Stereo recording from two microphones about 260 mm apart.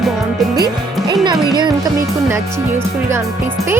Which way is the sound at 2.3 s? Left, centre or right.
Centre.